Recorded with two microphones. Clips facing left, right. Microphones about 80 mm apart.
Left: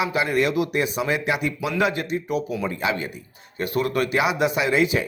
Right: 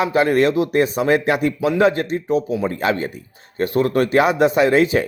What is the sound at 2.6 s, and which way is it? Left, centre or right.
Speech, right.